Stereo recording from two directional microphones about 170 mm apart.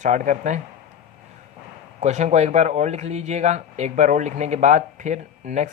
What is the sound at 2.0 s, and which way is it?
Speech, 45° right (ahead or behind).